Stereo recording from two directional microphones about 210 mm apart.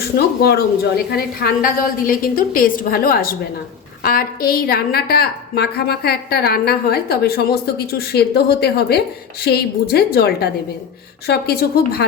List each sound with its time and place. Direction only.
0.4 s a woman's voice: 50° left (ahead or behind)